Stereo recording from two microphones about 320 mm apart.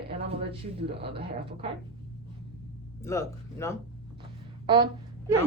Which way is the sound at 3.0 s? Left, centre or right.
Centre.